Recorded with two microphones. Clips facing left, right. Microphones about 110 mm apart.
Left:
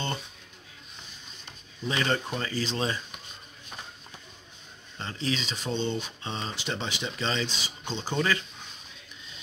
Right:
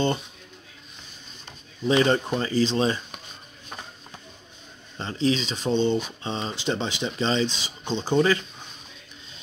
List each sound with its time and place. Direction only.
1.9 s speech: 25° right (ahead or behind)
4.9 s speech: 25° right (ahead or behind)